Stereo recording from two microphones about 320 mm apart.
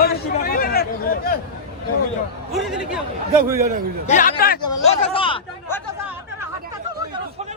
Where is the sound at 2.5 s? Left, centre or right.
Centre.